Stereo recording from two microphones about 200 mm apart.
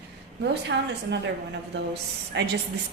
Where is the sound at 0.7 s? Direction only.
65° right (ahead or behind).